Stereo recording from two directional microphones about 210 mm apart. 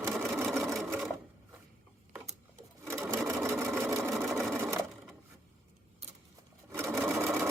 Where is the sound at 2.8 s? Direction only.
10° right (ahead or behind).